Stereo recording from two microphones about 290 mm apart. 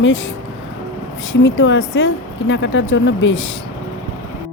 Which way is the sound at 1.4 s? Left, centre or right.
Left.